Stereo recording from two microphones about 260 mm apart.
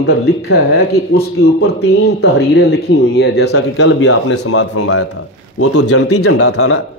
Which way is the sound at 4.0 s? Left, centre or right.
Left.